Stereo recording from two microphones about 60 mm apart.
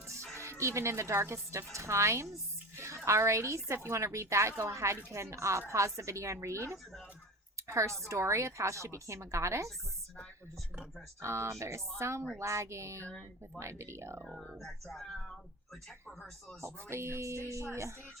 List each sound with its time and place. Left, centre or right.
0.6 s a woman's voice: right
7.7 s a woman's voice: right
11.2 s speech: right
14.5 s speech: centre
16.6 s speech: right